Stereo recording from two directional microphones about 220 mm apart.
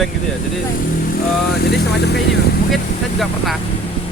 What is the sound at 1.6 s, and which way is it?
Speech, 50° left (ahead or behind).